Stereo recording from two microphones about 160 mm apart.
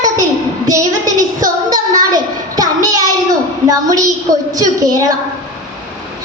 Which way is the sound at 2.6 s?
25° right (ahead or behind).